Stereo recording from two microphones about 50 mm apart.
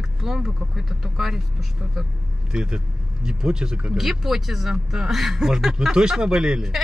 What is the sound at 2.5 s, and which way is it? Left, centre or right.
Speech, centre.